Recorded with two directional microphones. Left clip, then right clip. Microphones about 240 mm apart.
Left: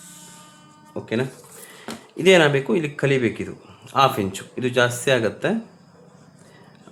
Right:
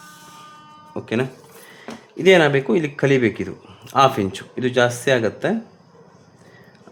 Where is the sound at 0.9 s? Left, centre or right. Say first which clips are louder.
Right 2 dB; centre.